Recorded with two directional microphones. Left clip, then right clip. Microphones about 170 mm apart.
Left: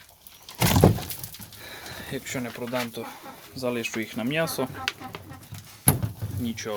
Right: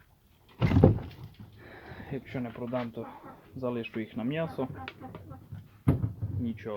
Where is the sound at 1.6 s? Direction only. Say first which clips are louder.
Left 7 dB; 5° left (ahead or behind); by 4.7 s 20° left (ahead or behind).